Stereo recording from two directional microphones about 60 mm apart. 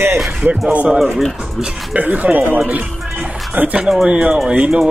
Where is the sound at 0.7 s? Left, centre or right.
Centre.